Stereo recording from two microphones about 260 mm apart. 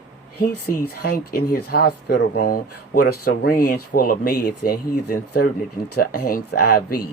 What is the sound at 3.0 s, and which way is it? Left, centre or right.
Speech, left.